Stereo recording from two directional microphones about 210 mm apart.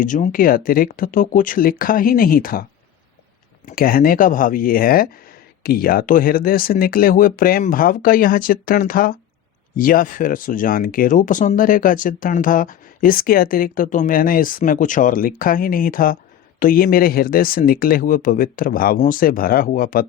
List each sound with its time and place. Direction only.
0.0 s speech: 40° left (ahead or behind)
3.7 s speech: 45° left (ahead or behind)